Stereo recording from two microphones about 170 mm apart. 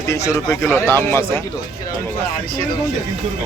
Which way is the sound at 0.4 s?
15° left (ahead or behind).